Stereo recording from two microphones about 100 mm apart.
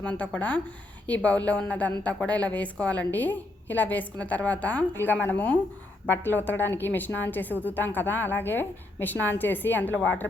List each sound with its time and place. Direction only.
0.0 s a woman's voice: 15° left (ahead or behind)